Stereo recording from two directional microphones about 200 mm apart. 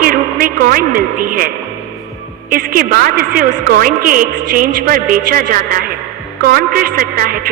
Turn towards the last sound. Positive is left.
turn(degrees=-45)  # may be behind; listen again after turning